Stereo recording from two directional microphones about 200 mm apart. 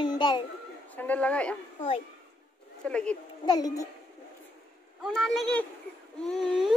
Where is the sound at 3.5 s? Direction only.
20° left (ahead or behind).